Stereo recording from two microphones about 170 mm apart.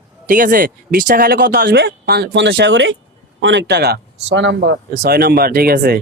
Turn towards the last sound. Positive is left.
turn(degrees=-65)  # may be behind; listen again after turning